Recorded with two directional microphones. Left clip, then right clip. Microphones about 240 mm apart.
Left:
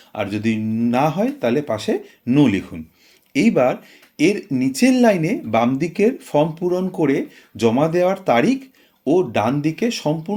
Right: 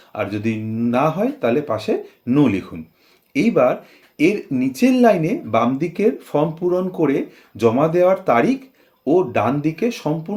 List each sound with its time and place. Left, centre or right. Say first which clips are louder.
0.1 s speech: even; left